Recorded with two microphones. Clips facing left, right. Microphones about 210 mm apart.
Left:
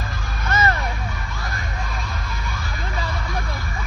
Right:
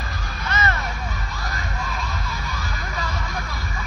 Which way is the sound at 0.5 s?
45° left (ahead or behind).